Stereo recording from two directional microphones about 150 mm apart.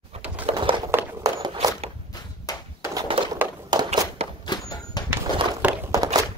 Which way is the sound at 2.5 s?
25° left (ahead or behind).